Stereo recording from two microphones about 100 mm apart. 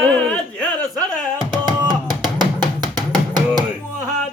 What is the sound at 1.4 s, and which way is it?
Music, 50° right (ahead or behind).